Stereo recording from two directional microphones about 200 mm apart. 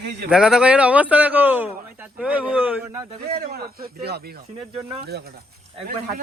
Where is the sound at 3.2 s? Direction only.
50° right (ahead or behind).